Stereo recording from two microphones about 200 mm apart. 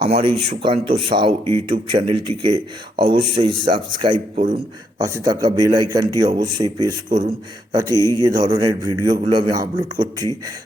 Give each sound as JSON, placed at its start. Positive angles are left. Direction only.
{"t": 0.1, "sound": "a man's voice", "side_deg": -25}
{"t": 7.9, "sound": "a man's voice", "side_deg": 15}
{"t": 8.2, "sound": "a man's voice", "side_deg": -20}